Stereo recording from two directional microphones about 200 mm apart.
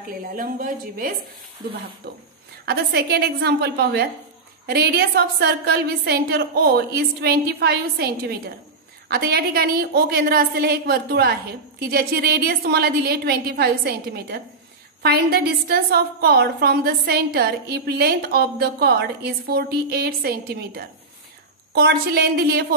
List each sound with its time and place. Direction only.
0.4 s a woman's voice: 45° right (ahead or behind)
2.0 s a woman's voice: 55° right (ahead or behind)